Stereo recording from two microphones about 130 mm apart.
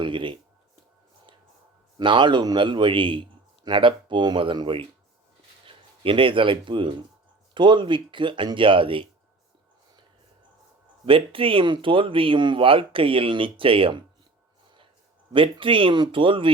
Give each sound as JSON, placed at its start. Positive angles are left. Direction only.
{"t": 0.0, "sound": "a man's voice", "side_deg": -40}
{"t": 2.0, "sound": "a man's voice", "side_deg": -35}
{"t": 11.0, "sound": "speech", "side_deg": -45}
{"t": 15.3, "sound": "a man's voice", "side_deg": -40}